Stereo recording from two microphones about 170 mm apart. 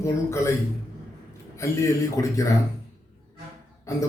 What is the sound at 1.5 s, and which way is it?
Speech, 15° left (ahead or behind).